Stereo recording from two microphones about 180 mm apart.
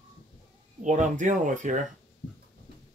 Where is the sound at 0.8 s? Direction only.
45° right (ahead or behind).